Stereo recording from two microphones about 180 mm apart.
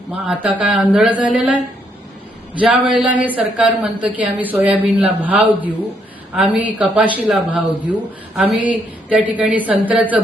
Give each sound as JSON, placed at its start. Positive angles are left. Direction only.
{"t": 0.6, "sound": "a woman's voice", "side_deg": -5}
{"t": 2.6, "sound": "a woman's voice", "side_deg": -5}